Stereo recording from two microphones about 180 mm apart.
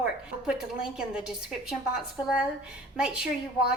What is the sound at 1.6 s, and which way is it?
A woman's voice, centre (ahead or behind).